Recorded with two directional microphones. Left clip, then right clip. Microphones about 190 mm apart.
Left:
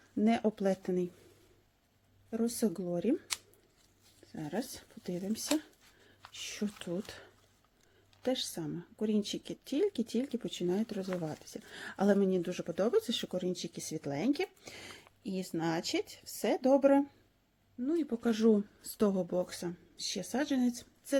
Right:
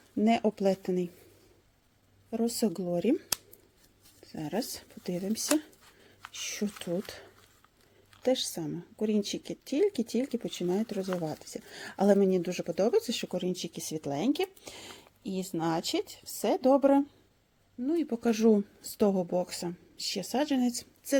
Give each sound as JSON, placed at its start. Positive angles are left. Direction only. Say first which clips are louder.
{"t": 0.2, "sound": "speech", "louder": "right 4 dB", "side_deg": -20}
{"t": 2.3, "sound": "speech", "louder": "right 3 dB", "side_deg": -25}
{"t": 4.3, "sound": "a woman's voice", "louder": "right 5 dB", "side_deg": -25}